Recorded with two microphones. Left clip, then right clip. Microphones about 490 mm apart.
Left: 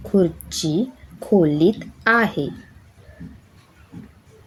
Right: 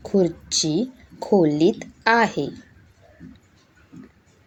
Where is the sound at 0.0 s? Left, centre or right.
Left.